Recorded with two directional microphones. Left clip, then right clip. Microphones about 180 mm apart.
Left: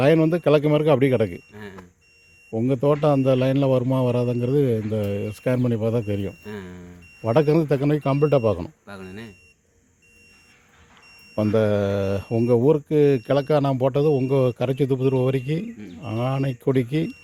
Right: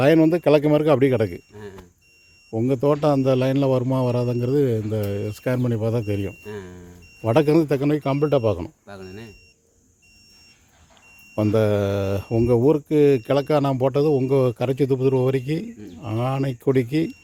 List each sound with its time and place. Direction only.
0.0 s speech: 5° right (ahead or behind)
2.5 s speech: centre (ahead or behind)
6.4 s speech: 25° left (ahead or behind)
7.2 s speech: 10° right (ahead or behind); by 9.3 s 5° left (ahead or behind)
11.3 s speech: 5° right (ahead or behind)